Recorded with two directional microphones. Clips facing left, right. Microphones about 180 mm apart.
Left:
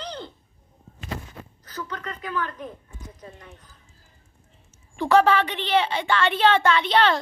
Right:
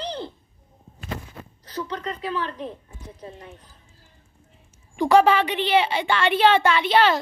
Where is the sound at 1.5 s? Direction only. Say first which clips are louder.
Right 4 dB; 30° right (ahead or behind).